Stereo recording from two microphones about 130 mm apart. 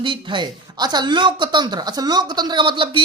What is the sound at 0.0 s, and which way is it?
A woman's voice, 40° right (ahead or behind).